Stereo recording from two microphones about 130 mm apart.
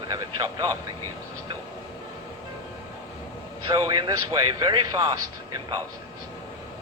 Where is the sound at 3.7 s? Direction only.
35° right (ahead or behind).